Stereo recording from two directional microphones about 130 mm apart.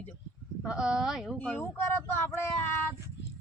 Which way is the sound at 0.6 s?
5° right (ahead or behind).